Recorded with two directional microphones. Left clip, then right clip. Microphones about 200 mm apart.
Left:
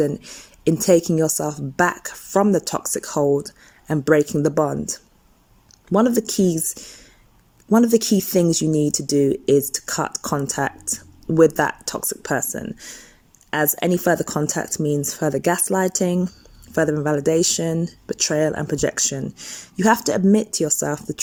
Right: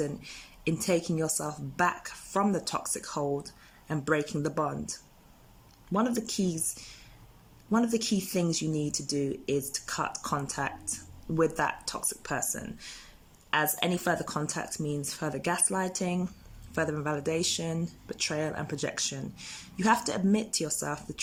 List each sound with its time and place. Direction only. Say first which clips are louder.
0.0 s speech: left 12 dB; 30° left (ahead or behind)